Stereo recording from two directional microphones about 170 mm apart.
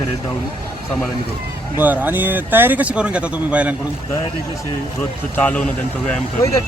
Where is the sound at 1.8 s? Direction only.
10° right (ahead or behind).